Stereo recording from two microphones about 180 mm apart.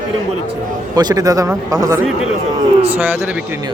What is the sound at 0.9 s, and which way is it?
Speech, 20° right (ahead or behind).